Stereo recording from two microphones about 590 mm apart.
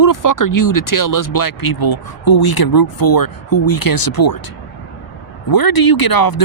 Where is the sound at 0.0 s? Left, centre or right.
Left.